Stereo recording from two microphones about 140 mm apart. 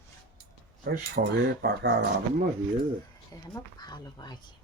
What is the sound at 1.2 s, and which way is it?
Speech, 90° right.